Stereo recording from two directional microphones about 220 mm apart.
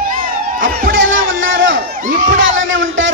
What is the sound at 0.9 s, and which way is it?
Music, 60° right (ahead or behind).